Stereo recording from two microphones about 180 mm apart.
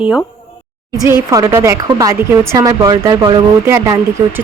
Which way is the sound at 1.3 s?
20° right (ahead or behind).